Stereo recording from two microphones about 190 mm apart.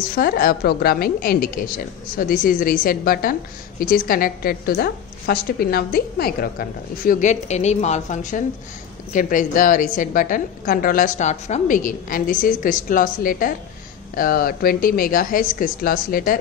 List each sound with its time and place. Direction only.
0.1 s a woman's voice: 50° left (ahead or behind)